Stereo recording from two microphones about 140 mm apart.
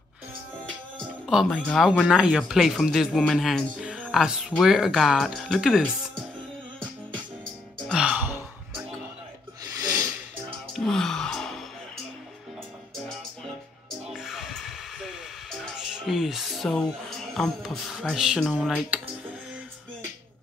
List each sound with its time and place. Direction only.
0.9 s music: centre (ahead or behind)
1.5 s speech: 5° left (ahead or behind)
2.0 s speech: 5° right (ahead or behind)
7.9 s music: 5° right (ahead or behind)
9.8 s snort: 25° right (ahead or behind)
10.7 s gasp: 5° left (ahead or behind)
14.1 s music: 5° right (ahead or behind)
17.3 s speech: centre (ahead or behind)